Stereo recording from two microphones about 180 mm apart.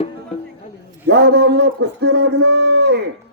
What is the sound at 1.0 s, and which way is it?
A man's voice, 65° right (ahead or behind).